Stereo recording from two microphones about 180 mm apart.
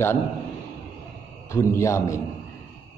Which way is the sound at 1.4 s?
15° left (ahead or behind).